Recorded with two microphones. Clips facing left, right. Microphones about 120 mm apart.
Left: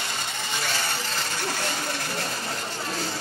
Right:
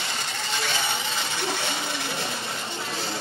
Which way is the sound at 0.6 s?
5° left (ahead or behind).